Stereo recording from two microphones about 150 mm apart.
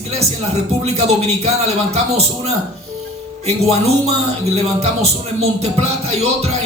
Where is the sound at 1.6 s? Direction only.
45° right (ahead or behind).